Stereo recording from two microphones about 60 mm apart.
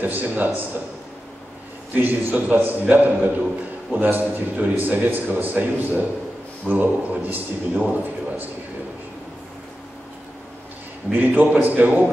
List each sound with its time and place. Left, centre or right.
0.0 s a man's voice: right
2.0 s a man's voice: right
11.1 s a man's voice: right